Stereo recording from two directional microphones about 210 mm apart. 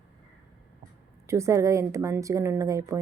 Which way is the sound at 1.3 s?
15° right (ahead or behind).